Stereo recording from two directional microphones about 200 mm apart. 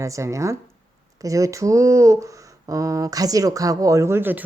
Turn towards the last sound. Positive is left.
turn(degrees=-10)  # may be behind; listen again after turning